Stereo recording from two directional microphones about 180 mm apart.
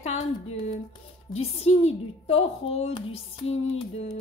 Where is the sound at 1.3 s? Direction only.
35° left (ahead or behind).